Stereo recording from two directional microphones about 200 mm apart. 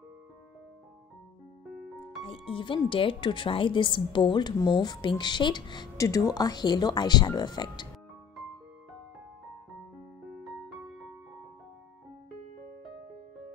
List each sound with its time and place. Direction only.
2.2 s speech: 25° left (ahead or behind)
10.4 s music: centre (ahead or behind)